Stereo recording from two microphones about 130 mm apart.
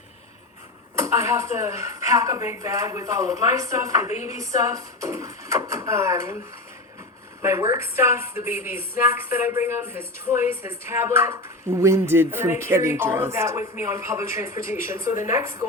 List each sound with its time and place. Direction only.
0.9 s a woman's voice: 20° right (ahead or behind)
7.4 s a woman's voice: 20° right (ahead or behind)